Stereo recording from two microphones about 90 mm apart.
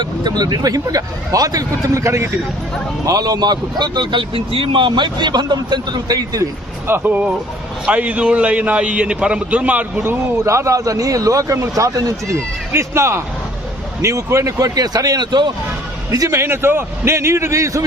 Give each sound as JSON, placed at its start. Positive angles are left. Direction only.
{"t": 0.0, "sound": "speech", "side_deg": -50}
{"t": 3.1, "sound": "speech", "side_deg": -45}
{"t": 6.8, "sound": "a man's voice", "side_deg": -25}
{"t": 10.0, "sound": "speech", "side_deg": -30}
{"t": 16.1, "sound": "speech", "side_deg": -35}